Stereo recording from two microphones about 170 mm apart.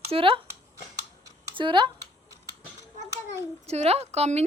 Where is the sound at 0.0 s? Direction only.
35° right (ahead or behind).